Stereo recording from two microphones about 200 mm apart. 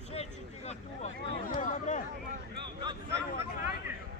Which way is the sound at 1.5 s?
40° left (ahead or behind).